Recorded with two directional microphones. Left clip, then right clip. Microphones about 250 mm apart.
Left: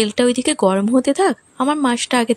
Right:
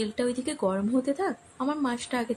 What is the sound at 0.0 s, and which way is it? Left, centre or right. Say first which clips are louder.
Speech: left 12 dB; left.